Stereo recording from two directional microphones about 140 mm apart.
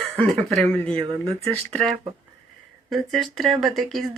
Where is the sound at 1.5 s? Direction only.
10° left (ahead or behind).